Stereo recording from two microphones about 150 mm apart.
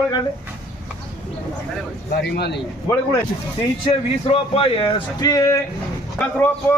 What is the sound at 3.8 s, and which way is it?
Speech, 40° left (ahead or behind).